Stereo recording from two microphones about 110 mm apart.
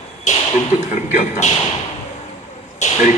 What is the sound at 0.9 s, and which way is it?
Speech, 90° left.